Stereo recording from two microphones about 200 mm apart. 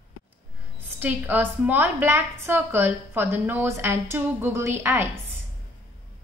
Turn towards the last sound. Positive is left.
turn(degrees=-10)  # may be behind; listen again after turning